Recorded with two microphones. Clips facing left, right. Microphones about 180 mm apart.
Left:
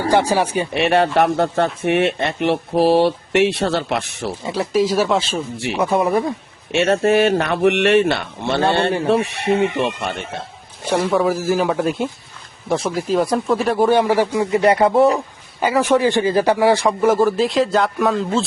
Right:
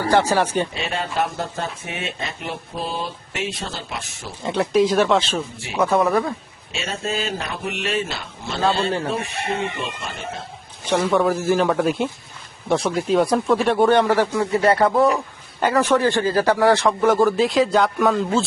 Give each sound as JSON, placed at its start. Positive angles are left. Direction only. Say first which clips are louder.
{"t": 0.1, "sound": "speech", "louder": "left 1 dB", "side_deg": 15}
{"t": 0.7, "sound": "speech", "louder": "left 11 dB", "side_deg": 75}
{"t": 4.4, "sound": "speech", "louder": "right 1 dB", "side_deg": 0}
{"t": 6.7, "sound": "speech", "louder": "left 12 dB", "side_deg": 65}
{"t": 10.8, "sound": "speech", "louder": "left 1 dB", "side_deg": 10}